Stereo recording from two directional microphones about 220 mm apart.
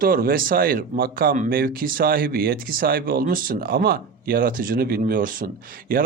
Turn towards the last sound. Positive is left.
turn(degrees=-40)  # may be behind; listen again after turning